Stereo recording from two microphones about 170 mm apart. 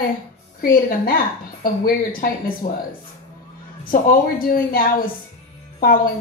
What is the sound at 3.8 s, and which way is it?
Speech, 55° left (ahead or behind).